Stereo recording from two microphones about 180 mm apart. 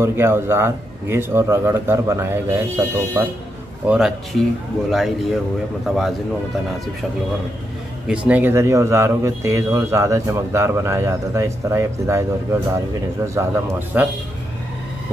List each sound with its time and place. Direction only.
0.0 s a man's voice: 15° right (ahead or behind)
8.3 s a man's voice: 10° right (ahead or behind)
13.3 s a man's voice: 15° right (ahead or behind)